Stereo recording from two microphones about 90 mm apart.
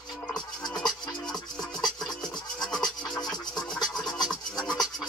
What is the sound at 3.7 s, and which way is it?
Music, 5° left (ahead or behind).